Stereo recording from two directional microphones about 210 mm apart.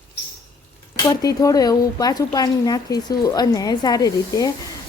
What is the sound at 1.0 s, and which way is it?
Speech, 20° left (ahead or behind).